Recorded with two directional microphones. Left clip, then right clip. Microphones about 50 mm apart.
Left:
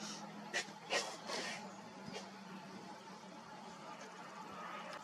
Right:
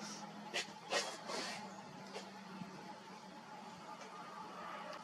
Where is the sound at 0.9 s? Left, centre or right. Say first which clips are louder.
Even; right.